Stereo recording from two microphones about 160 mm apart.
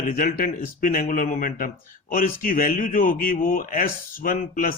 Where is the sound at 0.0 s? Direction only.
60° left (ahead or behind).